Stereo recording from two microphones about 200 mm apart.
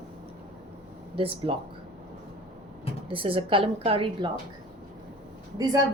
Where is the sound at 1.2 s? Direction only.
30° right (ahead or behind).